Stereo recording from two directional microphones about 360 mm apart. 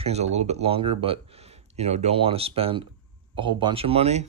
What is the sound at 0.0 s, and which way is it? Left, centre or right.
Speech, centre.